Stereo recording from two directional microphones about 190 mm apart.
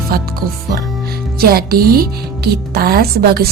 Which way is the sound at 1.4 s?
55° right (ahead or behind).